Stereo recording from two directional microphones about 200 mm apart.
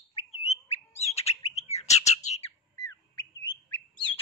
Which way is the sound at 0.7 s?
30° left (ahead or behind).